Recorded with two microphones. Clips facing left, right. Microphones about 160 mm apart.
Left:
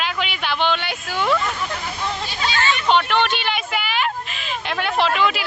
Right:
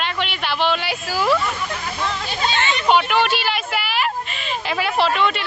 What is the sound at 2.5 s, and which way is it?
Speech, 20° right (ahead or behind).